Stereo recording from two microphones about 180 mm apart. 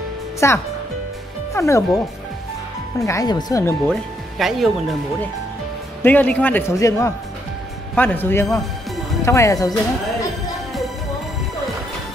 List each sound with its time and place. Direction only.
0.4 s a man's voice: 15° left (ahead or behind)
3.0 s a man's voice: 20° left (ahead or behind)
3.9 s speech: centre (ahead or behind)
6.0 s a man's voice: 10° left (ahead or behind)